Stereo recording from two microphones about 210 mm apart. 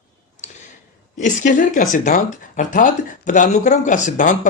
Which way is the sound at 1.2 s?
35° left (ahead or behind).